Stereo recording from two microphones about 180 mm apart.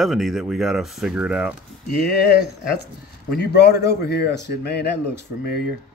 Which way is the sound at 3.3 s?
65° left (ahead or behind).